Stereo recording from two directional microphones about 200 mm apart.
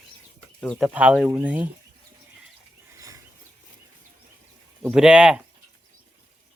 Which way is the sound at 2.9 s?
15° right (ahead or behind).